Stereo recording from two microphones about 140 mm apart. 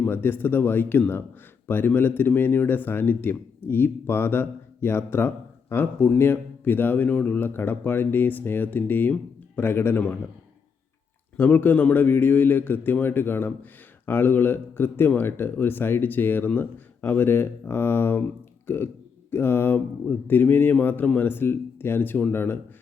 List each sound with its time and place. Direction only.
0.0 s speech: 15° left (ahead or behind)
11.3 s speech: 10° left (ahead or behind)